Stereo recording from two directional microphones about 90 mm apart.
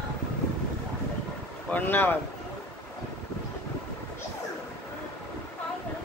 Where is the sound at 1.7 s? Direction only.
20° left (ahead or behind).